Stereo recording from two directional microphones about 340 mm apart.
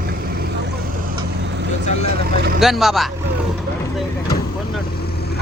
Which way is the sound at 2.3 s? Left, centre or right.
Right.